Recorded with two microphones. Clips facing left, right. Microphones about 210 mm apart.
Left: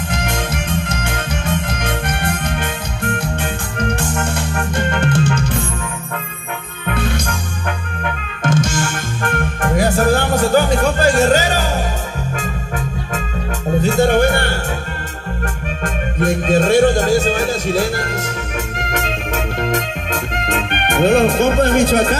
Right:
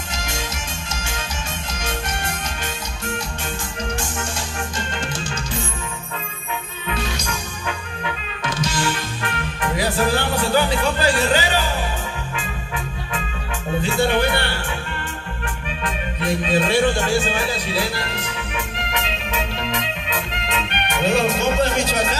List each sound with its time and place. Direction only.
0.1 s music: 55° left (ahead or behind)
6.9 s music: 55° left (ahead or behind)
15.8 s music: 45° left (ahead or behind)